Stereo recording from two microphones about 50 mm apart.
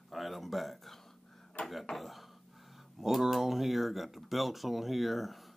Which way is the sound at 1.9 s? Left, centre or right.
Centre.